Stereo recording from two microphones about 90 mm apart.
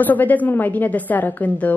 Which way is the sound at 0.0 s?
20° left (ahead or behind).